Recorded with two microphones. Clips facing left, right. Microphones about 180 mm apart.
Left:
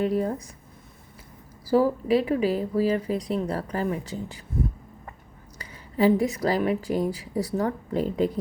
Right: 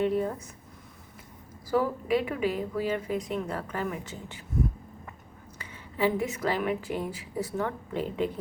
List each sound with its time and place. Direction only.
0.0 s speech: 40° left (ahead or behind)
1.6 s speech: 35° left (ahead or behind)
5.5 s speech: 40° left (ahead or behind)